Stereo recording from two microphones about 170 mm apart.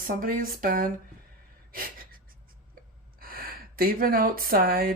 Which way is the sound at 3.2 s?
60° right (ahead or behind).